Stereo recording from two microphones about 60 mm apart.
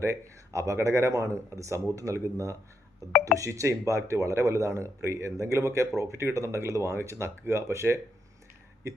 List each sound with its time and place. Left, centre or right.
0.0 s speech: right